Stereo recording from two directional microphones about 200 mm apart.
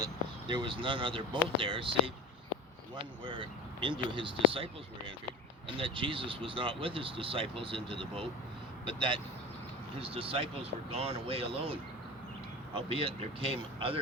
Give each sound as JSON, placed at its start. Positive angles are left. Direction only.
{"t": 0.0, "sound": "speech", "side_deg": -25}